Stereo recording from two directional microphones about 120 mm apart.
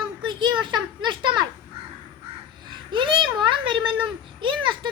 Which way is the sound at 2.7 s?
40° right (ahead or behind).